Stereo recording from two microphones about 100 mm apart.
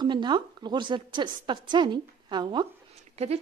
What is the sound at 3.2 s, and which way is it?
Speech, 90° right.